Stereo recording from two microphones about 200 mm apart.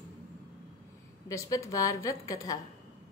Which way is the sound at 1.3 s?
15° left (ahead or behind).